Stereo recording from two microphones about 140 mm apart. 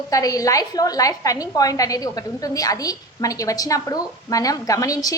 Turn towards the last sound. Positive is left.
turn(degrees=25)  # may be behind; listen again after turning